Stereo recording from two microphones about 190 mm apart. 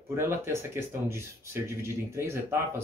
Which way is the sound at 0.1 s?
15° right (ahead or behind).